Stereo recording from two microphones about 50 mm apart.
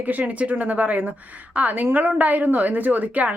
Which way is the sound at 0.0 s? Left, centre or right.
Right.